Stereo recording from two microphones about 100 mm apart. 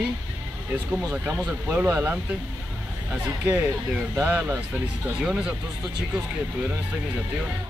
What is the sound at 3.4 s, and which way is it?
Speech, 20° right (ahead or behind).